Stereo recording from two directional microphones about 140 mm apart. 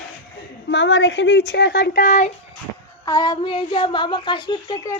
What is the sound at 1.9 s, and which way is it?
Speech, 75° left (ahead or behind).